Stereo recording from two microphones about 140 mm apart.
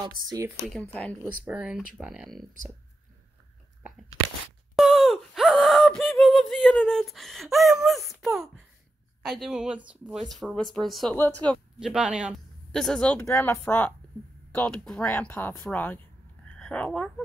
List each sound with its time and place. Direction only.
0.0 s speech: 30° right (ahead or behind)
1.2 s speech: 10° right (ahead or behind)
4.7 s a sound: centre (ahead or behind)
9.2 s speech: centre (ahead or behind)
13.2 s speech: 20° left (ahead or behind)